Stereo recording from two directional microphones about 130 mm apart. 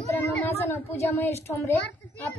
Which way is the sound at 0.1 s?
15° left (ahead or behind).